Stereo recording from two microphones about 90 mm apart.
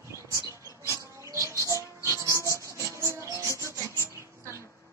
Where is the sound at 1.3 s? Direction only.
35° right (ahead or behind).